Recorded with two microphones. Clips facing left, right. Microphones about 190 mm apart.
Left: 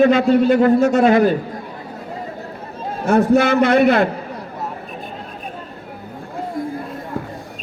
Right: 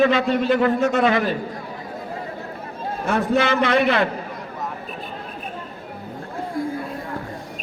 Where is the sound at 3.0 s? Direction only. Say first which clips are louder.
Left 6 dB; 45° left (ahead or behind).